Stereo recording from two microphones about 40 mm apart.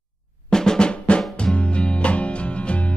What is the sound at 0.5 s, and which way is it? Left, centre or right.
Drum, centre.